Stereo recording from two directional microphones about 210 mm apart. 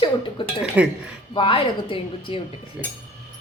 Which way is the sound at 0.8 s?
5° right (ahead or behind).